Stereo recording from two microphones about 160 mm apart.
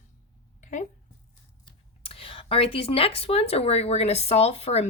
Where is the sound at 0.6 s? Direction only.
50° left (ahead or behind).